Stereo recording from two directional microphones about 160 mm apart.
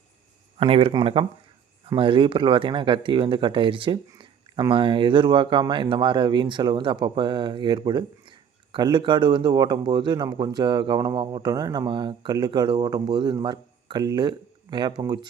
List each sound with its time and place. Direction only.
0.6 s speech: 35° right (ahead or behind)